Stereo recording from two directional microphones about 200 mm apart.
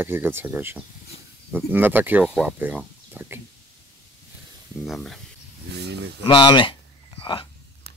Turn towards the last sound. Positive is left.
turn(degrees=25)  # may be behind; listen again after turning